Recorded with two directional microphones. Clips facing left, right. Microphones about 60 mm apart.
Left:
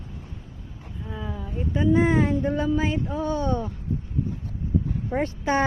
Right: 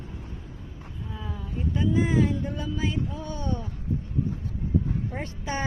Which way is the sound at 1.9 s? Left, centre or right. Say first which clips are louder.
Left 3 dB; left.